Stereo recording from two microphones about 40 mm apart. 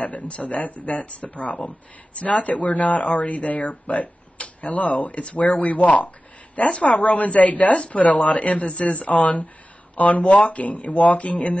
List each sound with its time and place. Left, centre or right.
0.0 s speech: left